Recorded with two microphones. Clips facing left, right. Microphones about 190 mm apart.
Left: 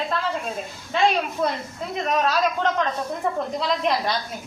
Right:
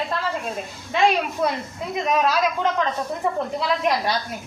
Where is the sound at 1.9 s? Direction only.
10° right (ahead or behind).